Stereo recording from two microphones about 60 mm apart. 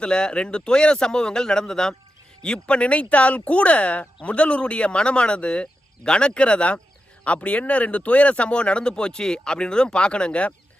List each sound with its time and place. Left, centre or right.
0.0 s speech: centre